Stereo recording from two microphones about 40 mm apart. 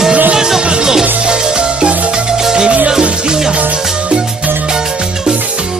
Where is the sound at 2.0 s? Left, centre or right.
Centre.